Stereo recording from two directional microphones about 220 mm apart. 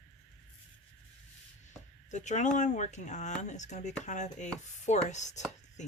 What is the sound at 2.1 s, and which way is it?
Speech, 35° left (ahead or behind).